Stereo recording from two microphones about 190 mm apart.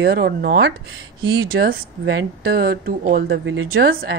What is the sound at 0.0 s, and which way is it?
Speech, 55° right (ahead or behind).